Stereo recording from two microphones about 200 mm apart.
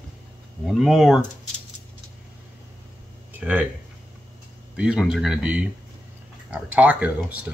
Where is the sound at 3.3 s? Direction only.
10° right (ahead or behind).